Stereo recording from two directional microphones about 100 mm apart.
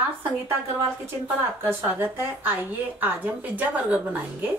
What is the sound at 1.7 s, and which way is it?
A woman's voice, 20° right (ahead or behind).